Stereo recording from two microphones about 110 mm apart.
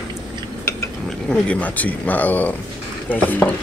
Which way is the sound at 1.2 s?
10° left (ahead or behind).